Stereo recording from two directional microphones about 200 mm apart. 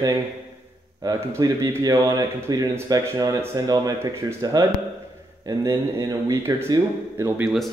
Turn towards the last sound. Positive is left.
turn(degrees=-15)  # may be behind; listen again after turning